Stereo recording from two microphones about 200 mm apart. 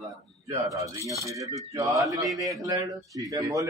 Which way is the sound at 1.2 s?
15° right (ahead or behind).